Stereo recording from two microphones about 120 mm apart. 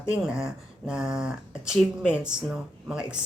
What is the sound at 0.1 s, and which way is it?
Speech, 5° right (ahead or behind).